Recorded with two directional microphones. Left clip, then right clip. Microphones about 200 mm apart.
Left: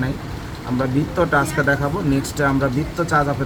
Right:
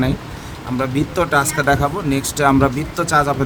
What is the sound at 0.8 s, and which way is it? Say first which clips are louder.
Speech: right 1 dB; 55° right (ahead or behind).